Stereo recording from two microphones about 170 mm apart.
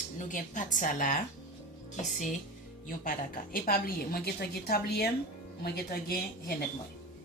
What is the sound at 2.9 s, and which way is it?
A woman's voice, 55° left (ahead or behind).